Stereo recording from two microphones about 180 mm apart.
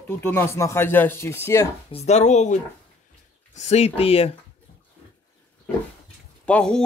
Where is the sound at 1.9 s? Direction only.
35° left (ahead or behind).